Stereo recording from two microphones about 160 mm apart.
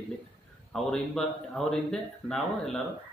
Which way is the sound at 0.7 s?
5° left (ahead or behind).